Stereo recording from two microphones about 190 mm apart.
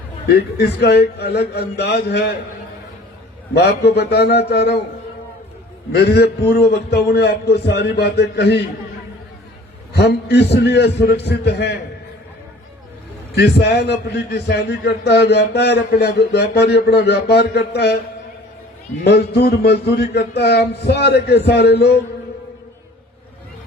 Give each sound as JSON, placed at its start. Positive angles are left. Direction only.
{"t": 0.3, "sound": "a man's voice", "side_deg": 60}
{"t": 3.5, "sound": "a man's voice", "side_deg": 60}
{"t": 5.9, "sound": "a man's voice", "side_deg": 60}
{"t": 9.9, "sound": "a man's voice", "side_deg": 60}
{"t": 13.3, "sound": "a man's voice", "side_deg": 60}
{"t": 19.0, "sound": "a man's voice", "side_deg": 60}